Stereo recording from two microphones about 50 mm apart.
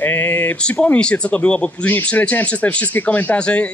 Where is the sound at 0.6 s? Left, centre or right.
Left.